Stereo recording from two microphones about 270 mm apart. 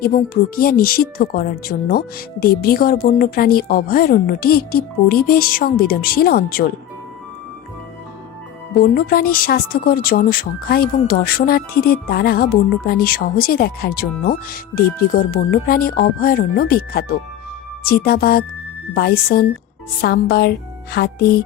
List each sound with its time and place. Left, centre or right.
0.0 s speech: left
8.8 s speech: left